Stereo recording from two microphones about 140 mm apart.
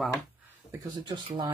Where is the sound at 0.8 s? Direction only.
30° right (ahead or behind).